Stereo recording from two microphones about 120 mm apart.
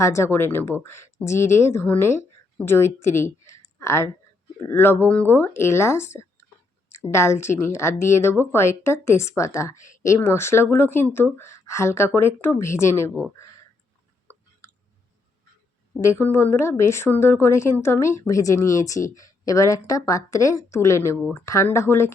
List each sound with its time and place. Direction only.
0.0 s a woman's voice: 25° left (ahead or behind)
14.3 s chewing: 15° left (ahead or behind)
16.0 s speech: 20° left (ahead or behind)